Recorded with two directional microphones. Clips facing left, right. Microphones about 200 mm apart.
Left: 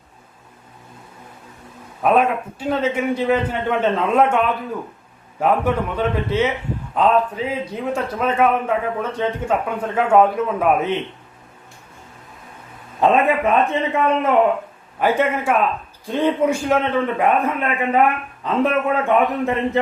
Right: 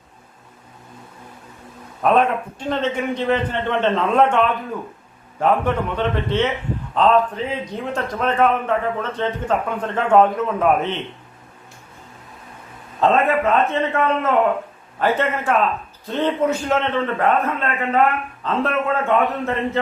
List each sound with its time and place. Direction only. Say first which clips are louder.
2.0 s a man's voice: even; 5° left (ahead or behind)
13.0 s a man's voice: left 1 dB; 15° left (ahead or behind)